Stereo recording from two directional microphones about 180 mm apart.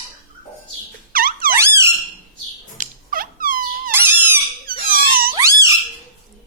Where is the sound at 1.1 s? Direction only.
55° right (ahead or behind).